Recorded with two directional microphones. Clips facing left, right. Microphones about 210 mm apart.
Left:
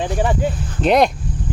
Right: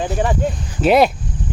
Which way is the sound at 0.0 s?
Centre (ahead or behind).